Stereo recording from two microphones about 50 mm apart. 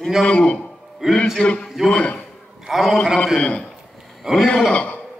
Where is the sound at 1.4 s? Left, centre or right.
Centre.